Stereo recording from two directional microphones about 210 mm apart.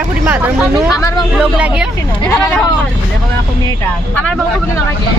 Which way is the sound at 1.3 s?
5° right (ahead or behind).